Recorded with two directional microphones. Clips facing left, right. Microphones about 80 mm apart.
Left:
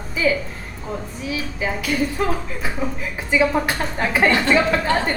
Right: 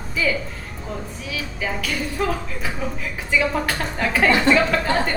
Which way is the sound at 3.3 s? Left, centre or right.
Centre.